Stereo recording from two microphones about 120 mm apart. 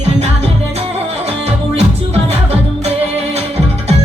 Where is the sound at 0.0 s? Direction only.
65° right (ahead or behind).